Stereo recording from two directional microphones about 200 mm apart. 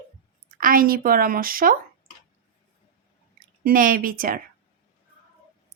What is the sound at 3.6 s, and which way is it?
Speech, 45° right (ahead or behind).